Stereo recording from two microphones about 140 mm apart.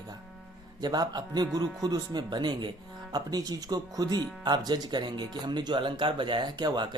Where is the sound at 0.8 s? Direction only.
30° right (ahead or behind).